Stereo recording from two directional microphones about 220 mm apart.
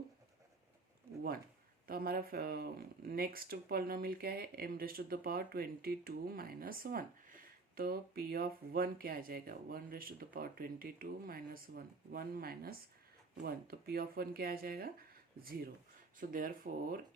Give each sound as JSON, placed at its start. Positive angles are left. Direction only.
{"t": 1.9, "sound": "speech", "side_deg": -45}